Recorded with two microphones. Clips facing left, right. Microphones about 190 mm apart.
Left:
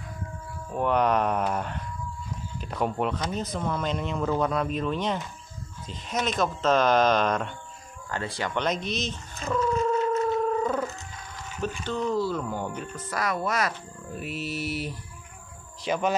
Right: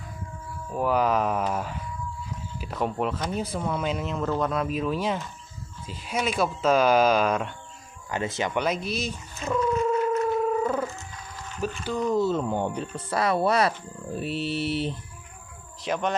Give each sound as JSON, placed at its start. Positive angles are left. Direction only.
{"t": 0.7, "sound": "speech", "side_deg": -5}
{"t": 8.1, "sound": "speech", "side_deg": -20}
{"t": 8.5, "sound": "speech", "side_deg": -5}
{"t": 9.4, "sound": "purr", "side_deg": -5}
{"t": 11.6, "sound": "speech", "side_deg": -10}
{"t": 15.8, "sound": "speech", "side_deg": 0}